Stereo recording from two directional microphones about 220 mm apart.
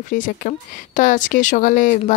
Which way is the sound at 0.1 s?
35° left (ahead or behind).